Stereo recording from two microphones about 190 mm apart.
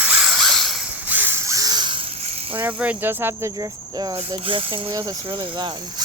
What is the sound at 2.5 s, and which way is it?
Cricket, 10° right (ahead or behind).